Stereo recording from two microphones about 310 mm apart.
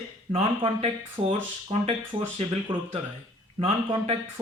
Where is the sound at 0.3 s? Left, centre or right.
Centre.